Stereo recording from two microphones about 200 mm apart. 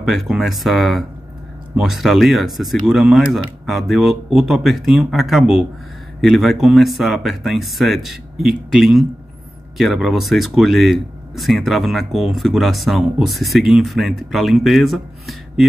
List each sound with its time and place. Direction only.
0.0 s speech: centre (ahead or behind)